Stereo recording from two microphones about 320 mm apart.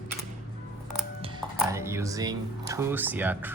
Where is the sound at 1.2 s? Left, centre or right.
Centre.